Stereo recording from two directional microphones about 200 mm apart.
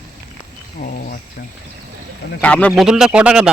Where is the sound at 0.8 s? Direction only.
35° left (ahead or behind).